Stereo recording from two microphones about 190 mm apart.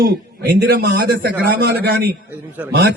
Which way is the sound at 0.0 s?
55° right (ahead or behind).